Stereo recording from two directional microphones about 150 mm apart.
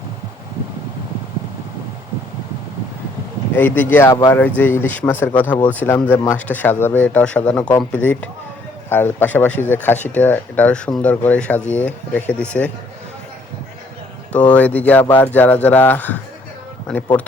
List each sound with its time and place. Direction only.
3.5 s speech: 15° left (ahead or behind)
4.1 s speech: 25° left (ahead or behind)
4.4 s speech: 10° left (ahead or behind)
14.5 s speech: 10° left (ahead or behind)